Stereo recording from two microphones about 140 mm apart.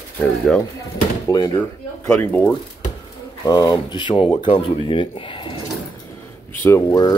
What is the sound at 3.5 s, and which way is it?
Speech, 30° left (ahead or behind).